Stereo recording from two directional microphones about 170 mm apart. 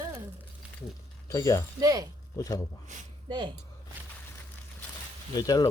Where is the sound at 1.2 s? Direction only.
20° left (ahead or behind).